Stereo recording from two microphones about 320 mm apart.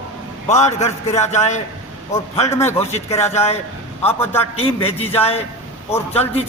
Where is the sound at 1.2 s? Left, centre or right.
Left.